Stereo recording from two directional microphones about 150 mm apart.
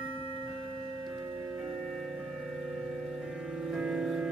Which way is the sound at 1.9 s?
Centre (ahead or behind).